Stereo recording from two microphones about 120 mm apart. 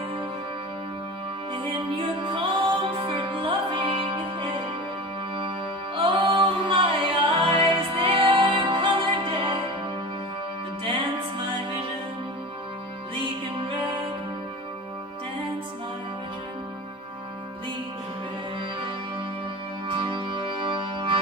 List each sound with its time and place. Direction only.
1.5 s music: 45° right (ahead or behind)
5.9 s music: 45° right (ahead or behind)
19.9 s music: 45° right (ahead or behind)